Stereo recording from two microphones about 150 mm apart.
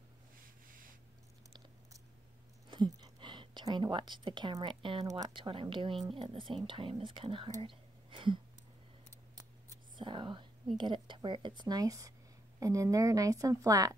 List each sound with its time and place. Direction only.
2.7 s a woman's voice: 30° right (ahead or behind)
7.6 s whispering: 35° right (ahead or behind)
9.3 s scissors: 25° right (ahead or behind)
10.8 s a woman's voice: 30° right (ahead or behind)